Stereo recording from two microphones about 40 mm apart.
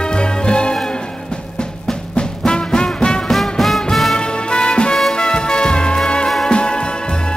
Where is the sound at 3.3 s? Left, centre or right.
Centre.